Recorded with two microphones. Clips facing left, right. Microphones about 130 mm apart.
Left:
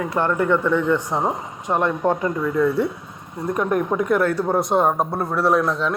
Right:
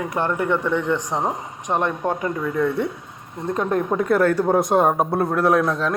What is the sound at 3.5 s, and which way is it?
Speech, 25° right (ahead or behind).